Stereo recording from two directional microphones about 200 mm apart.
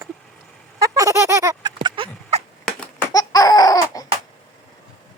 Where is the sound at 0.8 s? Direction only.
15° right (ahead or behind).